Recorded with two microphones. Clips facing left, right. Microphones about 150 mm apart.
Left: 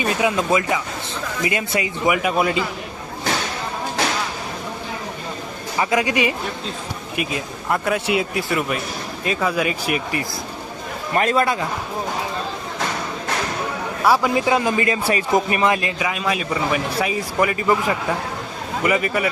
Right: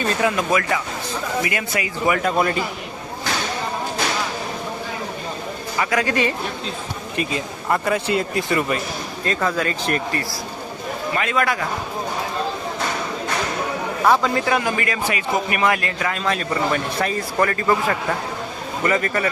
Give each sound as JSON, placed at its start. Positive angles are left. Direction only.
{"t": 0.0, "sound": "a man's voice", "side_deg": 15}
{"t": 2.1, "sound": "a man's voice", "side_deg": 10}
{"t": 5.7, "sound": "speech", "side_deg": 20}
{"t": 8.0, "sound": "speech", "side_deg": 80}
{"t": 8.4, "sound": "a man's voice", "side_deg": 5}
{"t": 11.1, "sound": "a man's voice", "side_deg": 40}
{"t": 14.0, "sound": "a man's voice", "side_deg": 10}